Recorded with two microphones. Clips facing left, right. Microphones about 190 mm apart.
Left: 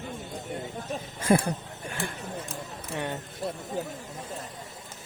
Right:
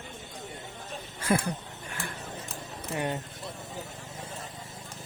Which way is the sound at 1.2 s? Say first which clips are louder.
Left 4 dB; 25° left (ahead or behind).